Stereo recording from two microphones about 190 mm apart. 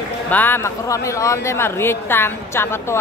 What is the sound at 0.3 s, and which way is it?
Speech, 10° left (ahead or behind).